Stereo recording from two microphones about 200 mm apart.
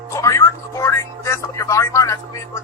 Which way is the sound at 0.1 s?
15° left (ahead or behind).